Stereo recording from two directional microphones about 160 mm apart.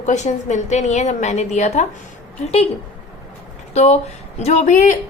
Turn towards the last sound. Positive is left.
turn(degrees=50)  # may be behind; listen again after turning